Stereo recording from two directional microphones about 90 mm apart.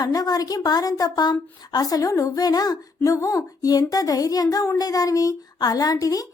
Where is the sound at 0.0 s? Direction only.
45° left (ahead or behind).